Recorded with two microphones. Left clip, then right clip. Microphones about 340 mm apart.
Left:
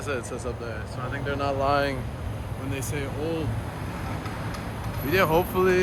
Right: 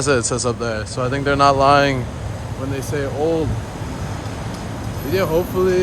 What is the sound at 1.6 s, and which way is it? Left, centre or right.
Speech, right.